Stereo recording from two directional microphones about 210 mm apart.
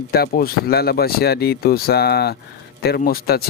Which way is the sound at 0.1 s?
45° left (ahead or behind).